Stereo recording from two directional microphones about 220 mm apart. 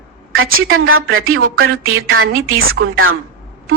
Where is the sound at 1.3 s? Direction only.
70° right (ahead or behind).